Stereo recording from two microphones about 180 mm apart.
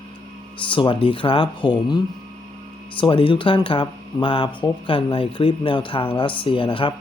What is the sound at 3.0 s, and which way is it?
Speech, 30° left (ahead or behind).